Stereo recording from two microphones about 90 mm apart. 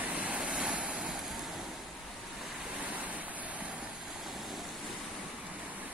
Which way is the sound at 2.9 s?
15° right (ahead or behind).